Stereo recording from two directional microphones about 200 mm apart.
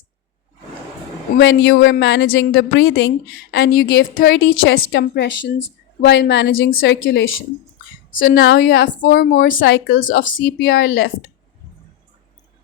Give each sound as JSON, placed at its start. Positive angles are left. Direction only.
{"t": 1.4, "sound": "a woman's voice", "side_deg": 65}
{"t": 8.4, "sound": "a woman's voice", "side_deg": 65}
{"t": 9.1, "sound": "speech", "side_deg": 50}
{"t": 9.6, "sound": "a woman's voice", "side_deg": 70}
{"t": 10.0, "sound": "speech", "side_deg": 40}
{"t": 10.8, "sound": "a woman's voice", "side_deg": 75}